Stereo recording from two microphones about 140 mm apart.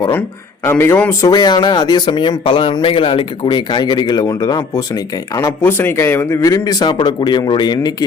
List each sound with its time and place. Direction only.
0.6 s a man's voice: 15° left (ahead or behind)
1.2 s speech: 30° left (ahead or behind)
5.4 s speech: 15° left (ahead or behind)